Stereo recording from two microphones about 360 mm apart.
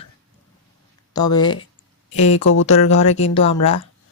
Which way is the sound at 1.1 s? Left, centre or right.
Centre.